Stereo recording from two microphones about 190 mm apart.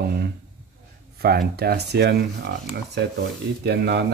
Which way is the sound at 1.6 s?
55° right (ahead or behind).